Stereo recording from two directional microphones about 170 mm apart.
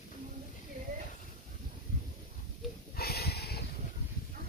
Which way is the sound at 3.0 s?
65° left (ahead or behind).